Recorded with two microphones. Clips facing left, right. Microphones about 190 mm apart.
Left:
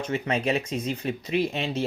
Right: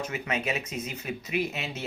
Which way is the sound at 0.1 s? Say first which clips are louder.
Left 5 dB; 30° left (ahead or behind).